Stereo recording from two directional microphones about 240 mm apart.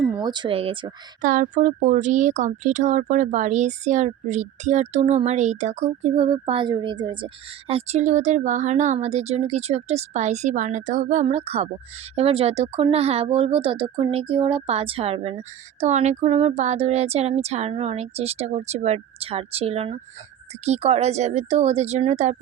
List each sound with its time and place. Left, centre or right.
0.1 s speech: centre
1.2 s speech: right